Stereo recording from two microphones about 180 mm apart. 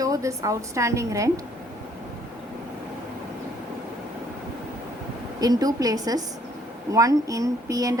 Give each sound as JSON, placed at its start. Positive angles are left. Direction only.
{"t": 0.0, "sound": "a woman's voice", "side_deg": -20}
{"t": 5.4, "sound": "speech", "side_deg": -20}